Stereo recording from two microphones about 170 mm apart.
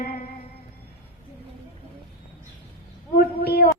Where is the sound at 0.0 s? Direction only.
60° left (ahead or behind).